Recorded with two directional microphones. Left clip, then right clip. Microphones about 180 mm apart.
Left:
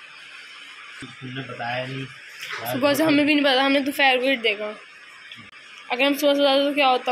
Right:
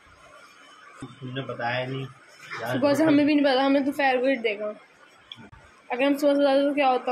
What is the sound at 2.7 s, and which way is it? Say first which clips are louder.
A woman's voice: left 1 dB; centre (ahead or behind).